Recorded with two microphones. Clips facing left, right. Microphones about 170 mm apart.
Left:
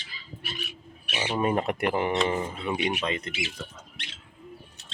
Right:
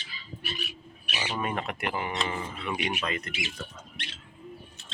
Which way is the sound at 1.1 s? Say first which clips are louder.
Left 6 dB; 25° left (ahead or behind).